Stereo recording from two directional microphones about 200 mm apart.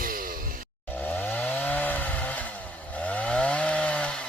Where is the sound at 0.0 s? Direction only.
45° right (ahead or behind).